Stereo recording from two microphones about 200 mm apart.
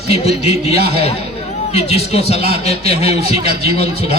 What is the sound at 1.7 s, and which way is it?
Speech, 30° left (ahead or behind).